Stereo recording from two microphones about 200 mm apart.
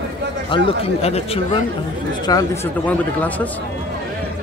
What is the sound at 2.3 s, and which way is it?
Speech, 20° left (ahead or behind).